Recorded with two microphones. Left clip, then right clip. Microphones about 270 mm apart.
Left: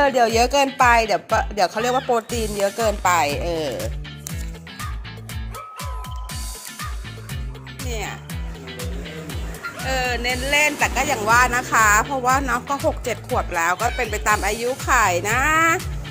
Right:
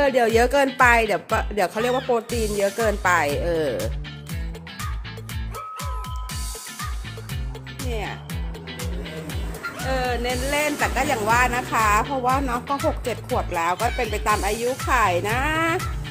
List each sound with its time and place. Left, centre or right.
0.0 s speech: centre
1.8 s speech: centre
9.3 s music: centre
9.8 s speech: centre
13.5 s speech: centre